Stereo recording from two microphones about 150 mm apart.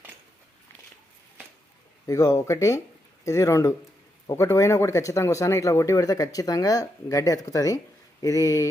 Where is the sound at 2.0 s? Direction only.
20° left (ahead or behind).